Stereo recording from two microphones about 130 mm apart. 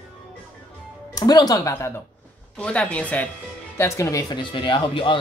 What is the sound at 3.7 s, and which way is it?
Speech, 20° left (ahead or behind).